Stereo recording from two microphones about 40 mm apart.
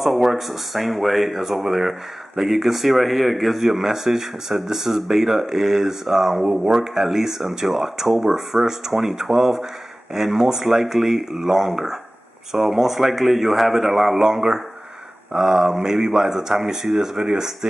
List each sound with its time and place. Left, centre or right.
0.0 s speech: centre